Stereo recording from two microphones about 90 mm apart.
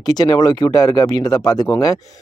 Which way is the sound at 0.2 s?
50° left (ahead or behind).